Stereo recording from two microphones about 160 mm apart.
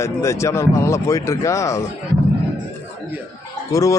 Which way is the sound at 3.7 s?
20° left (ahead or behind).